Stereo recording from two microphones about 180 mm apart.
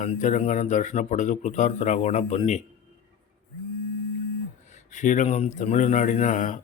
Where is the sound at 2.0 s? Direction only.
30° left (ahead or behind).